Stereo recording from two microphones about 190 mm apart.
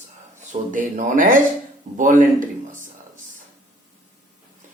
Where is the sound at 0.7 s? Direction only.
45° right (ahead or behind).